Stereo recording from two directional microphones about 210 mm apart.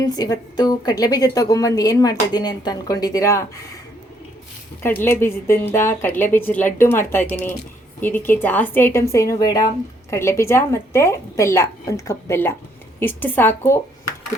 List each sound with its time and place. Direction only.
0.1 s a woman's voice: 20° left (ahead or behind)
4.8 s a woman's voice: 10° left (ahead or behind)